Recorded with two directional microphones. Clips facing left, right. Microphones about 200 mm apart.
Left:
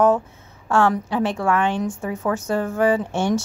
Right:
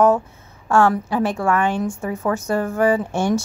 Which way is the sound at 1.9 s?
5° left (ahead or behind).